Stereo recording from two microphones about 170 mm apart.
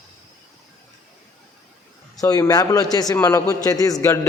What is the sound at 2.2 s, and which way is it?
A man's voice, 20° left (ahead or behind).